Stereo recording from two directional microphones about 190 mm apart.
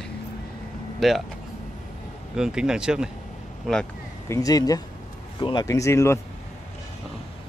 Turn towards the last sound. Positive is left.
turn(degrees=15)  # may be behind; listen again after turning